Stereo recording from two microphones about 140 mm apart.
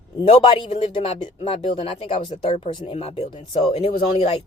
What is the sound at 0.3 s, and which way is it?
Speech, 40° left (ahead or behind).